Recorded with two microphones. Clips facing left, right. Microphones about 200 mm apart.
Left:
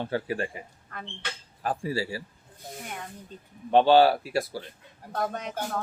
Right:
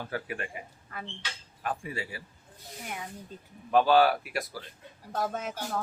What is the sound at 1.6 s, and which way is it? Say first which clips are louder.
Speech: left 6 dB; 35° left (ahead or behind).